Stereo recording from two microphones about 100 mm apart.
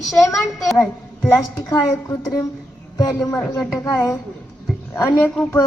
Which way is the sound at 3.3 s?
25° left (ahead or behind).